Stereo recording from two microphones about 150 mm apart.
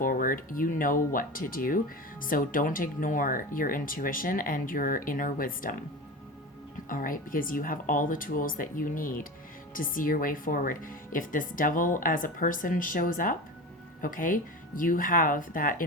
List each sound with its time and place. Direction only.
0.0 s speech: 65° left (ahead or behind)
6.8 s speech: 65° left (ahead or behind)